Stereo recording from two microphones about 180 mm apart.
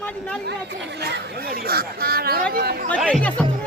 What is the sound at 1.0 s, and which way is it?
Speech, 60° right (ahead or behind).